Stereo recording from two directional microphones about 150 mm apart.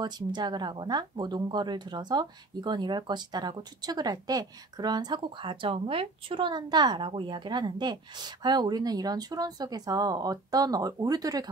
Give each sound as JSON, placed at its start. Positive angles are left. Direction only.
{"t": 0.0, "sound": "speech", "side_deg": -30}